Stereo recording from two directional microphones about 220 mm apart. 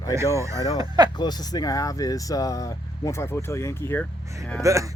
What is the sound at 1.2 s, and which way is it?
Speech, 20° left (ahead or behind).